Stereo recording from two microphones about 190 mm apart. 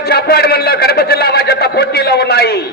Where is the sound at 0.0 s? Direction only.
55° left (ahead or behind).